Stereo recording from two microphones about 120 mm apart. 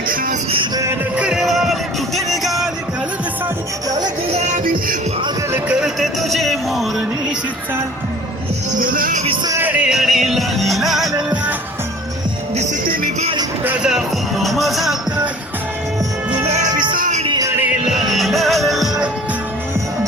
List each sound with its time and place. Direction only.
1.1 s music: 5° right (ahead or behind)
3.8 s music: 35° right (ahead or behind)
5.8 s music: centre (ahead or behind)
9.2 s music: 45° right (ahead or behind)
9.6 s music: 15° right (ahead or behind)
13.7 s music: 5° right (ahead or behind)
17.8 s music: centre (ahead or behind)